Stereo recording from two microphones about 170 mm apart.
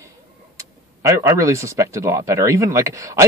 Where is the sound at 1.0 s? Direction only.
15° right (ahead or behind).